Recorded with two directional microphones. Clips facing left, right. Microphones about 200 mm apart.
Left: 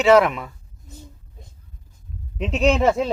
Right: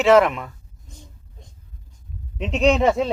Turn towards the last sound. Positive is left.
turn(degrees=0)  # may be behind; listen again after turning